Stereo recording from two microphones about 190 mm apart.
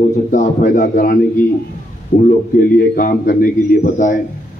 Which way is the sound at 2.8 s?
45° left (ahead or behind).